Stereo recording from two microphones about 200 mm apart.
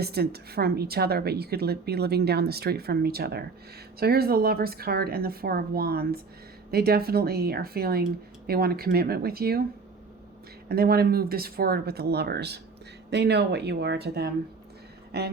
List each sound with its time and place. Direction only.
0.0 s speech: 50° right (ahead or behind)
10.7 s speech: 50° right (ahead or behind)